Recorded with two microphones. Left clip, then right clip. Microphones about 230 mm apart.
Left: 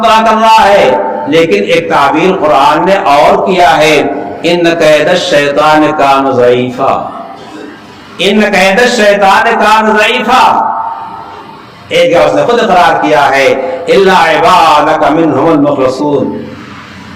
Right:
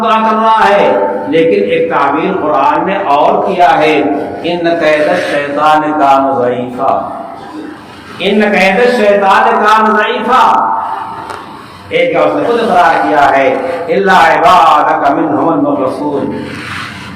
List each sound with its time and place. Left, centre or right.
0.0 s a man's voice: left
8.2 s a man's voice: left
11.9 s a man's voice: left